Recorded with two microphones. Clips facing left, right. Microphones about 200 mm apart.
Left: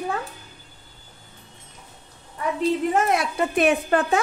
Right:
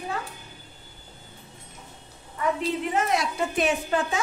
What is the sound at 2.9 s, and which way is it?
A woman's voice, 55° left (ahead or behind).